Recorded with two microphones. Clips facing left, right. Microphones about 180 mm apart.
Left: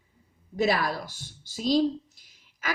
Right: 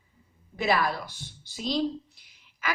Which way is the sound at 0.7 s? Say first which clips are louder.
Right 2 dB; 45° left (ahead or behind).